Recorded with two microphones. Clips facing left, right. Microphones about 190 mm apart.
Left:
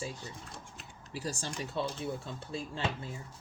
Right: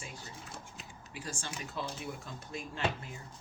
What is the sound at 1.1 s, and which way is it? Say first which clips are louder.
Speech: left 5 dB; 35° left (ahead or behind).